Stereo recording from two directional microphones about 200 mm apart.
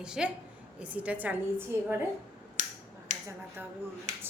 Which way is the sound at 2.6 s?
35° right (ahead or behind).